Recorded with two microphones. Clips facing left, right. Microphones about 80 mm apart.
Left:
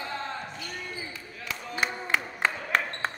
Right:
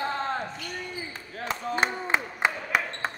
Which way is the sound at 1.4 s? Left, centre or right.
Right.